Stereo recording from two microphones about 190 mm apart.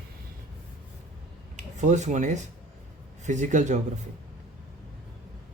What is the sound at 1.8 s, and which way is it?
Speech, 40° right (ahead or behind).